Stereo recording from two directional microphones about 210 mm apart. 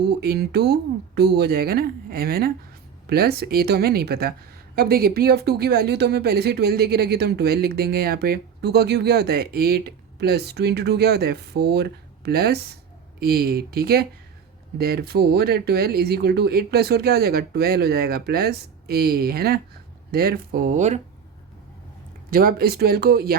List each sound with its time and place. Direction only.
0.1 s speech: 50° right (ahead or behind); by 21.0 s 35° right (ahead or behind)
22.3 s speech: 45° right (ahead or behind)